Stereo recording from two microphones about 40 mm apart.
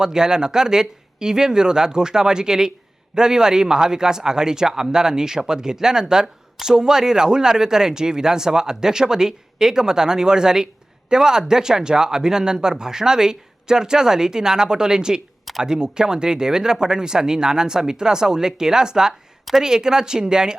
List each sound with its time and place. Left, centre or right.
0.0 s speech: centre